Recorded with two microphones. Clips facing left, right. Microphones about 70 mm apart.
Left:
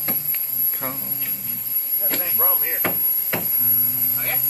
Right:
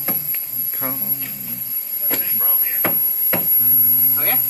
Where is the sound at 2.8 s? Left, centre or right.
Centre.